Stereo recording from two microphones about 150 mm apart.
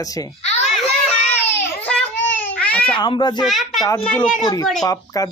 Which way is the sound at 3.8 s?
15° left (ahead or behind).